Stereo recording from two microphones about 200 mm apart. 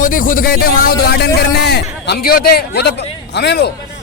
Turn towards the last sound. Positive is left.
turn(degrees=55)  # may be behind; listen again after turning